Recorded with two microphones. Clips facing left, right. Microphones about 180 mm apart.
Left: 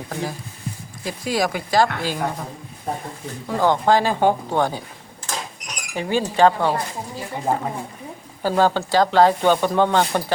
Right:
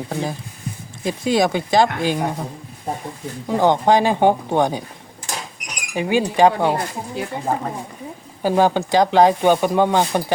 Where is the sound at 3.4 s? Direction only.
20° right (ahead or behind).